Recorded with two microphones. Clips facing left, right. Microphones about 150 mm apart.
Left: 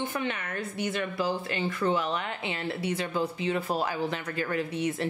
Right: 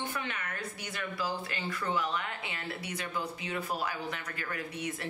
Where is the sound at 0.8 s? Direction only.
25° left (ahead or behind).